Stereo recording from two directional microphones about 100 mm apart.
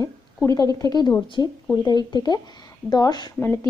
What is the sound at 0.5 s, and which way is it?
A woman's voice, 35° left (ahead or behind).